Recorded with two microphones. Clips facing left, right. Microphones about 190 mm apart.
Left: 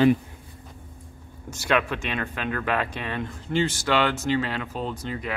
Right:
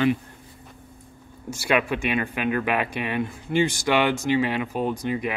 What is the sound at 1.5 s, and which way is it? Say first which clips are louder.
Speech: right 1 dB; 10° right (ahead or behind).